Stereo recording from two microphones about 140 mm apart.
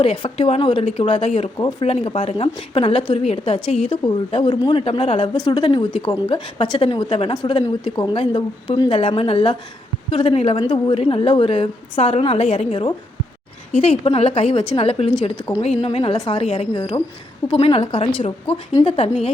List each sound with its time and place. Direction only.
0.0 s a woman's voice: 45° left (ahead or behind)
16.1 s speech: 30° left (ahead or behind)
16.4 s a woman's voice: 45° left (ahead or behind)
16.7 s a woman's voice: 35° left (ahead or behind)